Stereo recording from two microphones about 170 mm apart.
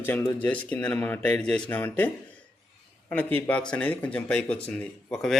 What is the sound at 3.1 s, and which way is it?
A man's voice, 10° left (ahead or behind).